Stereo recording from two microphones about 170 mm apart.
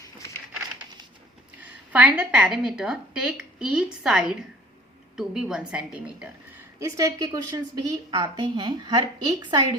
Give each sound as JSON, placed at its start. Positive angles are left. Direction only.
{"t": 1.9, "sound": "a woman's voice", "side_deg": -5}
{"t": 6.7, "sound": "a woman's voice", "side_deg": -20}